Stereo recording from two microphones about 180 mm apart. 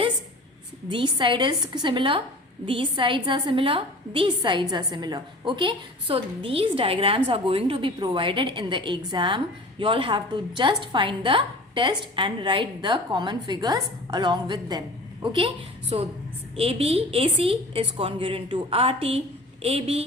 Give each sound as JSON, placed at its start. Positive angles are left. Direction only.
{"t": 0.9, "sound": "a woman's voice", "side_deg": -25}